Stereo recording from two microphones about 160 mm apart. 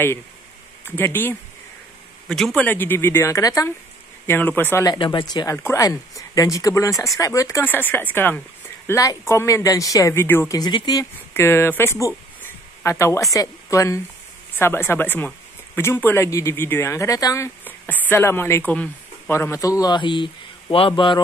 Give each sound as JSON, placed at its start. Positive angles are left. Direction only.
{"t": 0.8, "sound": "speech", "side_deg": 15}
{"t": 4.8, "sound": "speech", "side_deg": 30}
{"t": 10.6, "sound": "speech", "side_deg": 25}